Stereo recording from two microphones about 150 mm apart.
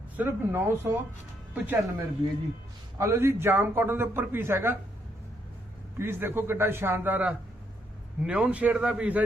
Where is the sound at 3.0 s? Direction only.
20° right (ahead or behind).